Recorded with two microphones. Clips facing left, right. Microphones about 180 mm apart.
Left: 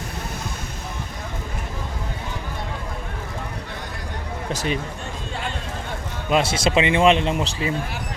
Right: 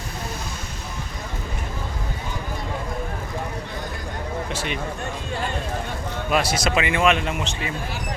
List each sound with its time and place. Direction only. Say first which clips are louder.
4.5 s speech: left 8 dB; 40° left (ahead or behind)
6.3 s speech: left 3 dB; 25° left (ahead or behind)